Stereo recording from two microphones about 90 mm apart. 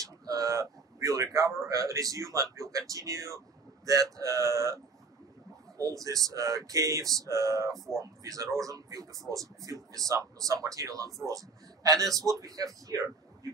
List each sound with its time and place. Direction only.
0.0 s a sound: 40° right (ahead or behind)
1.7 s speech: 40° right (ahead or behind)
5.8 s speech: 40° right (ahead or behind)